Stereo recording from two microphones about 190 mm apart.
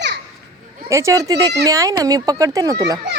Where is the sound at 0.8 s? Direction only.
15° right (ahead or behind).